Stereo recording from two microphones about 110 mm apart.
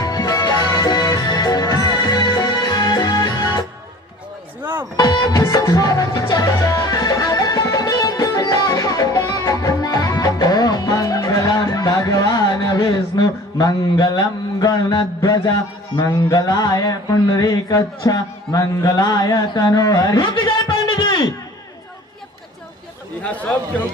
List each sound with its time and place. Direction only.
0.0 s music: 35° left (ahead or behind)
4.6 s music: 20° right (ahead or behind)
4.9 s music: 40° left (ahead or behind)
16.3 s a sound: 35° left (ahead or behind)
23.3 s a man's voice: 10° left (ahead or behind)